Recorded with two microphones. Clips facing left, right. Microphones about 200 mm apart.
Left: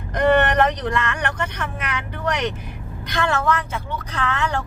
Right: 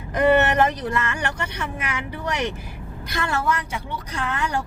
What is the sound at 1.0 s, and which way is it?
Speech, 60° left (ahead or behind).